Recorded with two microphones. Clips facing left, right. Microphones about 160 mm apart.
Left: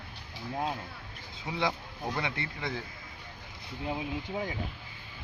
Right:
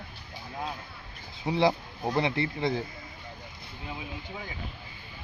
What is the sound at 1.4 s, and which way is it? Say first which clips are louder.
Speech: right 7 dB; 30° right (ahead or behind).